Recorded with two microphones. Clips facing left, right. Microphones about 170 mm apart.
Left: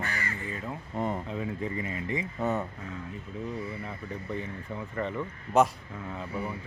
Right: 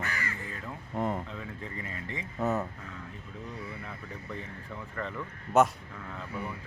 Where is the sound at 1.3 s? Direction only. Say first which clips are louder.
Left 8 dB; 15° left (ahead or behind).